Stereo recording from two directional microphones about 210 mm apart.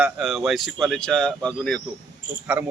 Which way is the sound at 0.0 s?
Centre (ahead or behind).